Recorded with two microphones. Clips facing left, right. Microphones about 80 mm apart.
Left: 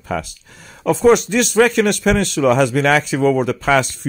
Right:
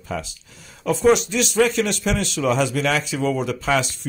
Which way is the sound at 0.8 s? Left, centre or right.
Left.